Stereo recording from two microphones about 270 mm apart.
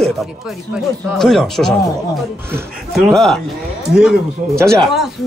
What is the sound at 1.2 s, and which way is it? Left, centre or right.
Speech, centre.